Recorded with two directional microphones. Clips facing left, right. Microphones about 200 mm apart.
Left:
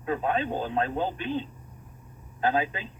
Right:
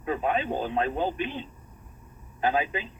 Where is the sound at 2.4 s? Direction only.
15° right (ahead or behind).